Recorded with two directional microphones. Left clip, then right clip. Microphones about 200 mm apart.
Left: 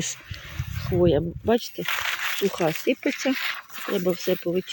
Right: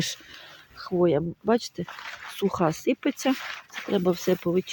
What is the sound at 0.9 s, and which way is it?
Speech, 5° right (ahead or behind).